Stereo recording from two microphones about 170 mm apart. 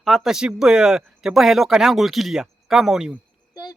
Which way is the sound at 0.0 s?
Centre (ahead or behind).